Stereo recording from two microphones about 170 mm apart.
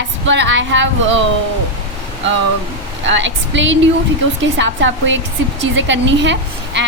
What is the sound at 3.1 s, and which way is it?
Speech, 90° right.